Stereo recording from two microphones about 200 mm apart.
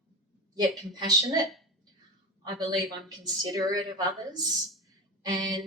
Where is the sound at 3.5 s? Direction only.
20° right (ahead or behind).